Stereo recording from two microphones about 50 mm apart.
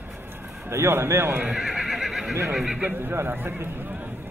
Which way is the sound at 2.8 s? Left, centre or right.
Right.